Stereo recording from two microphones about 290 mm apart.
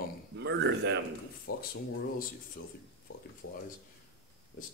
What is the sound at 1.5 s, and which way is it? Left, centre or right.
Speech, left.